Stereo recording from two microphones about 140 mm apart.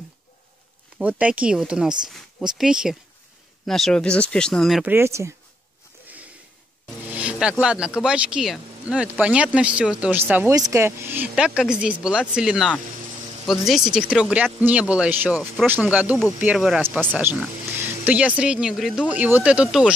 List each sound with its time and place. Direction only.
0.9 s speech: 10° right (ahead or behind)
4.8 s speech: 15° right (ahead or behind)
7.1 s music: 10° right (ahead or behind)
7.6 s speech: 5° right (ahead or behind)
18.0 s speech: 10° right (ahead or behind)